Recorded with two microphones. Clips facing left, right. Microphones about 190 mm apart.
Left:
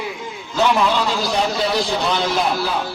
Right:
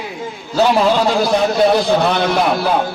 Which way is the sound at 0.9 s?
50° right (ahead or behind).